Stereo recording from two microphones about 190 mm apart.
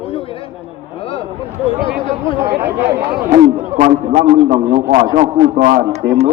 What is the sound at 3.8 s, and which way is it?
A man's voice, 45° right (ahead or behind).